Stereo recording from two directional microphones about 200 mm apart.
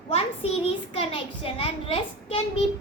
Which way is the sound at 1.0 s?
30° left (ahead or behind).